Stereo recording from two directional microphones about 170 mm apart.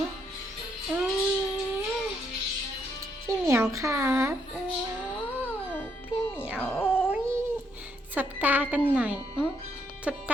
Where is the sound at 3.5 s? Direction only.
15° right (ahead or behind).